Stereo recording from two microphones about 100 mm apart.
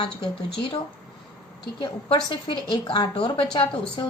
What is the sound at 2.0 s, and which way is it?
A woman's voice, 55° left (ahead or behind).